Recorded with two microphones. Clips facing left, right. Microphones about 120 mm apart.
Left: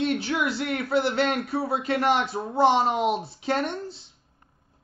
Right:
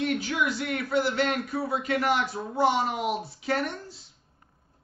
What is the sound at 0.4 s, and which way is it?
A man's voice, 30° left (ahead or behind).